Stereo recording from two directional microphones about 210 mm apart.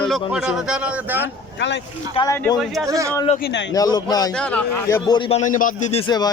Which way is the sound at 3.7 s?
15° left (ahead or behind).